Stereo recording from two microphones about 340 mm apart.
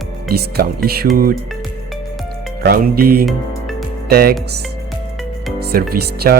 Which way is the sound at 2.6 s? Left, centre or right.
Right.